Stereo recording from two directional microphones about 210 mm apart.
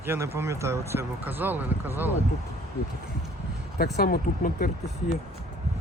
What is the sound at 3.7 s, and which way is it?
Speech, 50° left (ahead or behind).